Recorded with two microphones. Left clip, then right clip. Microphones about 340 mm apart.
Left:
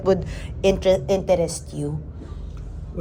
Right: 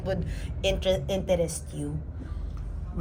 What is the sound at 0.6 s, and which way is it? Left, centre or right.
A woman's voice, left.